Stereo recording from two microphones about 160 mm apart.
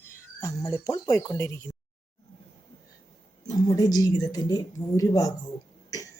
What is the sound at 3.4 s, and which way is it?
A woman's voice, 25° left (ahead or behind).